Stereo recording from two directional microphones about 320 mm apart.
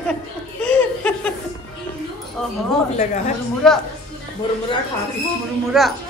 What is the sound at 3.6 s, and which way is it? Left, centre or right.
Speech, centre.